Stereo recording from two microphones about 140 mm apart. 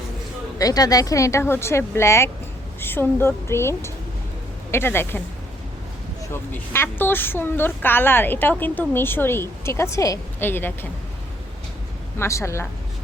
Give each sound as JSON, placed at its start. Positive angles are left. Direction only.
{"t": 0.6, "sound": "a woman's voice", "side_deg": 25}
{"t": 6.5, "sound": "a woman's voice", "side_deg": 15}
{"t": 12.2, "sound": "speech", "side_deg": 20}